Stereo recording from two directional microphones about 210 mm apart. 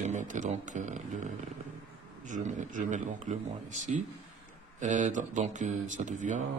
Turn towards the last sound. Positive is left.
turn(degrees=-35)  # may be behind; listen again after turning